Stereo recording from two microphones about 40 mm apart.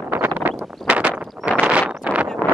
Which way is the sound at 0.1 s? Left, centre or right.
Right.